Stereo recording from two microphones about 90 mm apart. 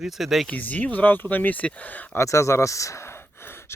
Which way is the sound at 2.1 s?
35° left (ahead or behind).